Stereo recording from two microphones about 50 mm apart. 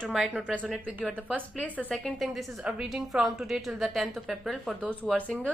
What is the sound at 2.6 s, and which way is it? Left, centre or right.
Speech, right.